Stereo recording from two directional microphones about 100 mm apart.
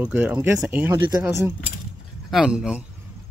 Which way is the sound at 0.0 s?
15° right (ahead or behind).